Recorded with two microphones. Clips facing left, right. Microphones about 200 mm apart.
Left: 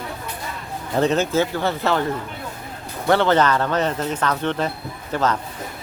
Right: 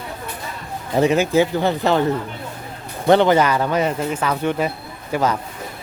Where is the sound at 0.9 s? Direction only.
10° right (ahead or behind).